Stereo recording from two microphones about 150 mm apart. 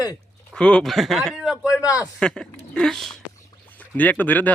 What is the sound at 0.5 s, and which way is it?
Speech, 5° left (ahead or behind).